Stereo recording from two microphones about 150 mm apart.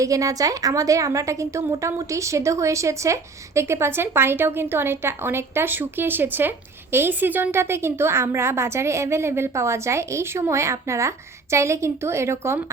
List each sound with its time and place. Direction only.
0.0 s a woman's voice: 20° right (ahead or behind)